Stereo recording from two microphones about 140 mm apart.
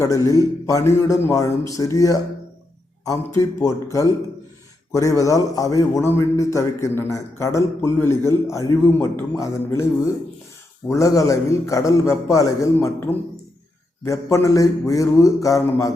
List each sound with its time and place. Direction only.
0.0 s a man's voice: 25° left (ahead or behind)
4.9 s a man's voice: 20° left (ahead or behind)
10.8 s a man's voice: 20° left (ahead or behind)